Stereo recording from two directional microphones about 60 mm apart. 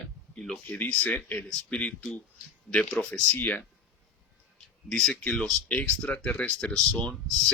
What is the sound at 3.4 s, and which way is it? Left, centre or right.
Speech, left.